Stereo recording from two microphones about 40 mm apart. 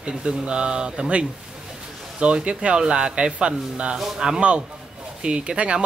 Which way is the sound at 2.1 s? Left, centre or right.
Right.